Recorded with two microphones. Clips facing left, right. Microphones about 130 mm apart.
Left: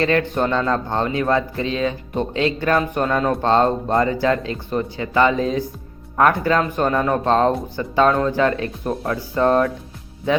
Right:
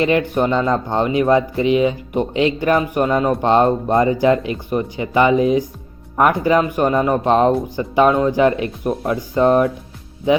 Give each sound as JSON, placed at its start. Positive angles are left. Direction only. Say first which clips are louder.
{"t": 0.0, "sound": "speech", "louder": "right 2 dB", "side_deg": -15}